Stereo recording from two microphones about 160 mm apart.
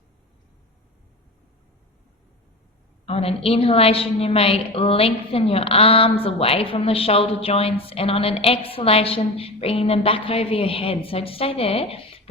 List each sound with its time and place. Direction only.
3.1 s a woman's voice: 40° left (ahead or behind)